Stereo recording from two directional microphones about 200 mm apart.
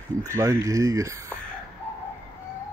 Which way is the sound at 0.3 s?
15° right (ahead or behind).